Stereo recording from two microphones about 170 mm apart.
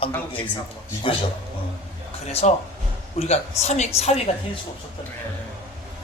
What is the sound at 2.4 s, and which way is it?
A man's voice, 45° left (ahead or behind).